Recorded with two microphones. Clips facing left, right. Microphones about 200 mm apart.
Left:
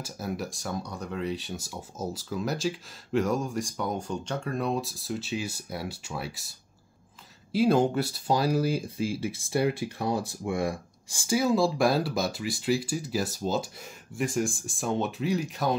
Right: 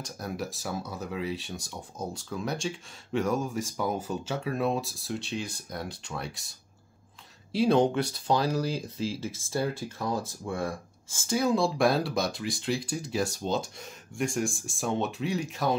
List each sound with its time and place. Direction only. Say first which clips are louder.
0.0 s speech: left 1 dB; centre (ahead or behind)
7.5 s speech: even; 5° left (ahead or behind)
10.0 s speech: left 2 dB; 30° left (ahead or behind)
10.4 s speech: left 3 dB; 15° left (ahead or behind)
11.3 s speech: left 2 dB; centre (ahead or behind)